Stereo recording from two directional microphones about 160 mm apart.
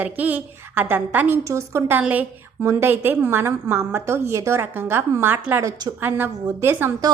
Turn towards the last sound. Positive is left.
turn(degrees=-15)  # may be behind; listen again after turning